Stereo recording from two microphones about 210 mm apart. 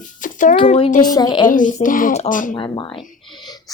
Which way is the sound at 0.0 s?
40° left (ahead or behind).